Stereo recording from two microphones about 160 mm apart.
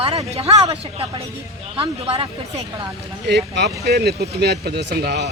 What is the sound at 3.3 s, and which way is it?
Speech, 90° right.